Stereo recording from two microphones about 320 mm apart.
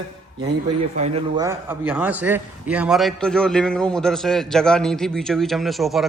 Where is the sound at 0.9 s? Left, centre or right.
Centre.